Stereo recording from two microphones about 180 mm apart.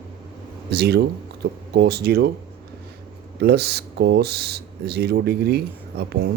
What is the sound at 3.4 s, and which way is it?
Speech, 65° right (ahead or behind).